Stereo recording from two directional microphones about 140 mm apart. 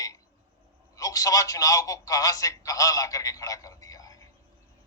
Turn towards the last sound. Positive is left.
turn(degrees=25)  # may be behind; listen again after turning